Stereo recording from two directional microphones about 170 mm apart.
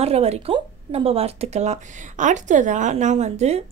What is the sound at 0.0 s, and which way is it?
Speech, 35° right (ahead or behind).